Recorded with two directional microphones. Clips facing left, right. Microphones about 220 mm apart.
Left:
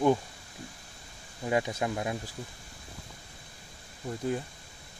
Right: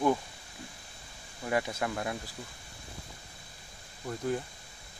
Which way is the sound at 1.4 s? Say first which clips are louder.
Left 2 dB; 20° left (ahead or behind).